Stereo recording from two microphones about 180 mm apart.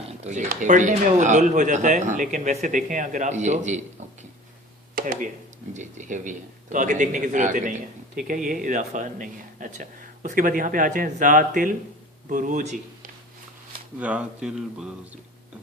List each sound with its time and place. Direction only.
0.2 s speech: 40° right (ahead or behind)
4.9 s speech: 50° right (ahead or behind)
14.0 s speech: 5° right (ahead or behind)